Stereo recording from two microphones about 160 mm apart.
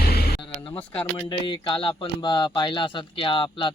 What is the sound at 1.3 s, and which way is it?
Speech, 30° left (ahead or behind).